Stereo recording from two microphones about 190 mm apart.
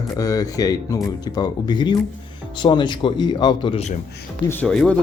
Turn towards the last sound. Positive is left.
turn(degrees=5)  # may be behind; listen again after turning